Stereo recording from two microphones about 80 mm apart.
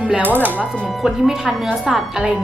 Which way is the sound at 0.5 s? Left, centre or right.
Centre.